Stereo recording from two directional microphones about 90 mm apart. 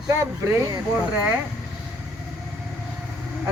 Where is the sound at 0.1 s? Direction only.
35° right (ahead or behind).